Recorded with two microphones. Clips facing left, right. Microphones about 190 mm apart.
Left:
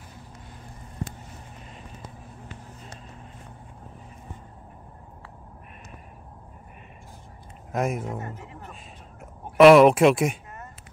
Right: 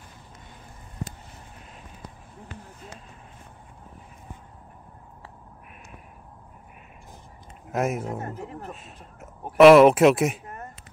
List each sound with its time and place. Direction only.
7.7 s speech: 5° right (ahead or behind)
8.2 s speech: 40° right (ahead or behind)
9.2 s speech: centre (ahead or behind)
10.4 s a sound: 55° right (ahead or behind)